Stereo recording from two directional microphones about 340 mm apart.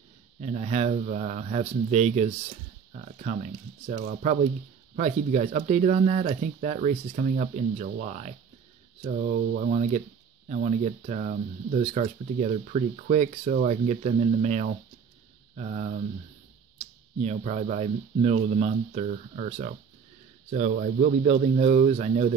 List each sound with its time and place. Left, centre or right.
0.4 s speech: centre